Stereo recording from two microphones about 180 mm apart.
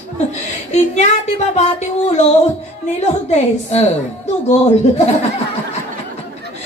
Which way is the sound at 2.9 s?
35° left (ahead or behind).